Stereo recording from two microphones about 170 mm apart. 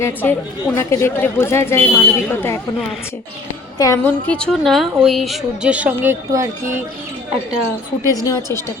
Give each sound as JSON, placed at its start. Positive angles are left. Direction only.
{"t": 0.0, "sound": "a woman's voice", "side_deg": 15}
{"t": 3.8, "sound": "a woman's voice", "side_deg": 20}
{"t": 8.0, "sound": "a woman's voice", "side_deg": 20}